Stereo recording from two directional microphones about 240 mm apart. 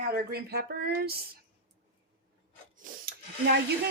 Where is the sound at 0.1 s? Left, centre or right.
Right.